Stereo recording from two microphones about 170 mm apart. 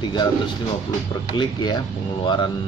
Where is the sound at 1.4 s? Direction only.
25° left (ahead or behind).